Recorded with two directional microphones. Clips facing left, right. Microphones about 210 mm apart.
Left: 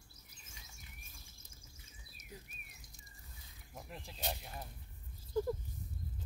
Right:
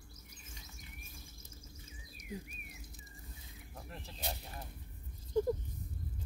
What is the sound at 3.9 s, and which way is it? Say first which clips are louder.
Speech: right 1 dB; 15° left (ahead or behind).